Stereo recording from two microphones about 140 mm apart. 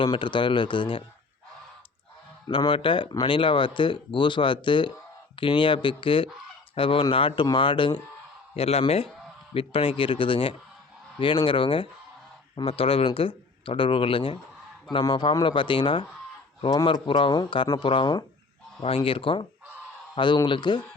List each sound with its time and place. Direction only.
0.0 s speech: 35° left (ahead or behind)
2.5 s speech: 35° left (ahead or behind)
8.5 s speech: 45° left (ahead or behind)